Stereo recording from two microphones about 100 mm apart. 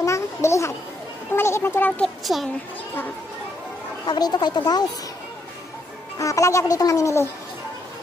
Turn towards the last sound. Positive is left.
turn(degrees=30)  # may be behind; listen again after turning